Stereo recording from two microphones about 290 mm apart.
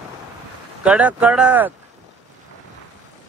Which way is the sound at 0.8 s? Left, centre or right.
Centre.